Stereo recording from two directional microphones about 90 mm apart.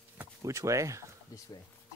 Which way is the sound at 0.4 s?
35° right (ahead or behind).